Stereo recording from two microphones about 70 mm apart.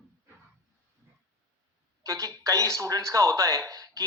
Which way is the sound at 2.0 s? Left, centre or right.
Right.